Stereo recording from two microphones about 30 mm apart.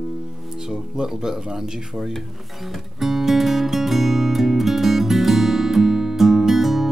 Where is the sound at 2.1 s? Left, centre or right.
Centre.